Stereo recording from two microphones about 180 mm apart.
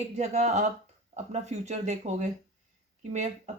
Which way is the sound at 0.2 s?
40° right (ahead or behind).